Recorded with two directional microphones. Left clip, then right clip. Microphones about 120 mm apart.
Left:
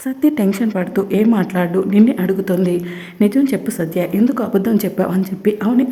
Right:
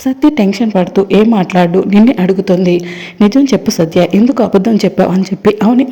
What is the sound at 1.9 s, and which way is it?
Speech, 40° right (ahead or behind).